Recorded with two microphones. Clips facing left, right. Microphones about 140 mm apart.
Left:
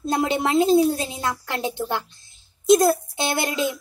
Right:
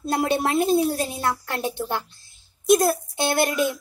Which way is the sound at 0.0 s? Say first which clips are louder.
Even; 20° left (ahead or behind).